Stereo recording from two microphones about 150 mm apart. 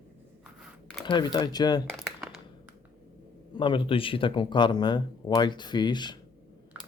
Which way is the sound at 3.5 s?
35° left (ahead or behind).